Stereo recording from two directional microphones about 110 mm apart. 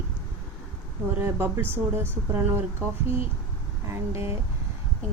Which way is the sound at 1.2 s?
20° right (ahead or behind).